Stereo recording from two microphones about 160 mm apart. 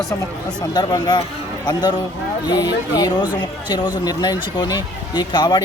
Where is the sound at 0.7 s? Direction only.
25° left (ahead or behind).